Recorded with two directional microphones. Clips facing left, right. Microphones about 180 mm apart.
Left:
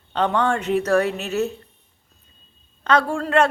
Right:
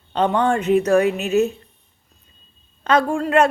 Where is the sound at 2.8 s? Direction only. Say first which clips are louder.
Right 2 dB; 15° right (ahead or behind).